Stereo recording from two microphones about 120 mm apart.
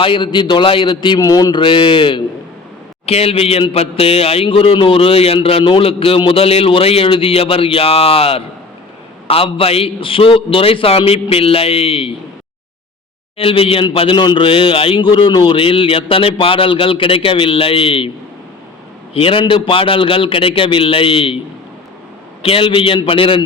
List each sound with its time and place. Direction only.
0.0 s a man's voice: 45° left (ahead or behind)
3.1 s a man's voice: 55° left (ahead or behind)
13.3 s a man's voice: 50° left (ahead or behind)
19.1 s a man's voice: 50° left (ahead or behind)
22.4 s a man's voice: 50° left (ahead or behind)